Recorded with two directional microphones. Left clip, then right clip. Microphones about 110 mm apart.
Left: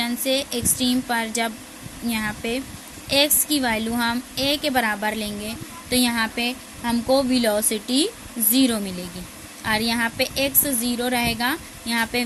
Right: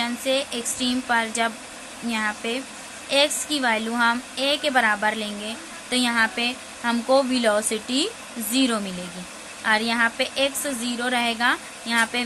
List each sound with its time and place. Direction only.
0.0 s a woman's voice: 55° left (ahead or behind)
9.6 s a woman's voice: 60° left (ahead or behind)